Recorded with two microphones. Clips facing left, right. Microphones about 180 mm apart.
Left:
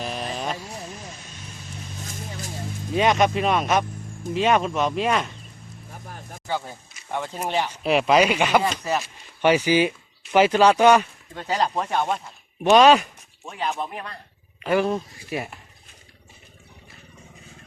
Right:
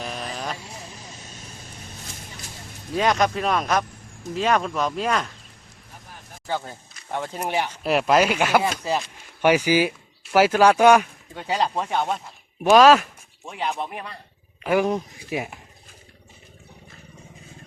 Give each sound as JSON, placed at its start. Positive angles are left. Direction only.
{"t": 0.0, "sound": "vehicle", "side_deg": 0}
{"t": 2.9, "sound": "speech", "side_deg": 0}
{"t": 4.7, "sound": "speech", "side_deg": 25}
{"t": 4.9, "sound": "speech", "side_deg": 5}
{"t": 7.1, "sound": "speech", "side_deg": -10}
{"t": 7.9, "sound": "speech", "side_deg": 0}
{"t": 13.4, "sound": "speech", "side_deg": -15}